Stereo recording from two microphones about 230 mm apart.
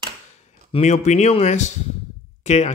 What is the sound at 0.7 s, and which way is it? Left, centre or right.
Speech, left.